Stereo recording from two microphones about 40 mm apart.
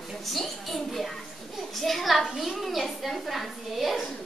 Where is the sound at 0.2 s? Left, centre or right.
Centre.